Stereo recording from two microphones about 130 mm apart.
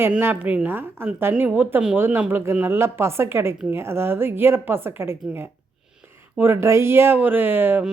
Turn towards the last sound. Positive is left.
turn(degrees=-15)  # may be behind; listen again after turning